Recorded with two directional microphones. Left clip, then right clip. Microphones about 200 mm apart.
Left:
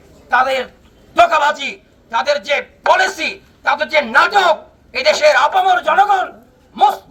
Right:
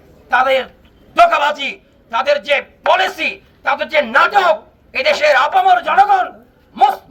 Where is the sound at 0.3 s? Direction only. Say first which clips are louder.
Right 1 dB; 10° right (ahead or behind).